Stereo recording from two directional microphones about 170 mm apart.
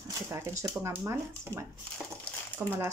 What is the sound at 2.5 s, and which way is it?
Speech, 10° right (ahead or behind).